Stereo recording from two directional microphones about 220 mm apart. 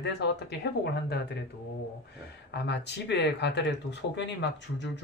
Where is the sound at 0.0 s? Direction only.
50° left (ahead or behind).